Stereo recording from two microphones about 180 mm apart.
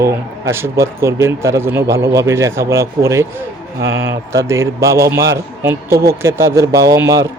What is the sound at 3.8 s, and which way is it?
Speech, 90° right.